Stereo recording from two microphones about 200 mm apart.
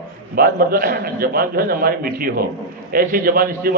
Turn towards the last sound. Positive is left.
turn(degrees=-45)  # may be behind; listen again after turning